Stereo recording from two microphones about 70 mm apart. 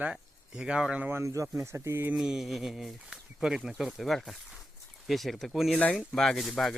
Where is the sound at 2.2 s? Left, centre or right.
Centre.